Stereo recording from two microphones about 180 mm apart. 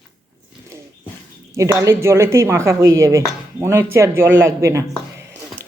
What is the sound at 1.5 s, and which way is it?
Speech, 15° right (ahead or behind).